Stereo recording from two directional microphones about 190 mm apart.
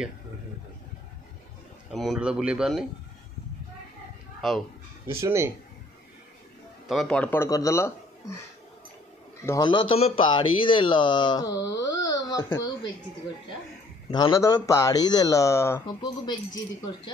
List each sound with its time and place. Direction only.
1.9 s speech: centre (ahead or behind)
4.4 s speech: centre (ahead or behind)
5.1 s speech: 15° right (ahead or behind)
6.9 s speech: centre (ahead or behind)
9.5 s speech: 25° left (ahead or behind)
14.0 s speech: 25° left (ahead or behind)